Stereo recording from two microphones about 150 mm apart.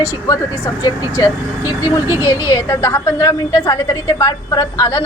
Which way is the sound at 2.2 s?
20° left (ahead or behind).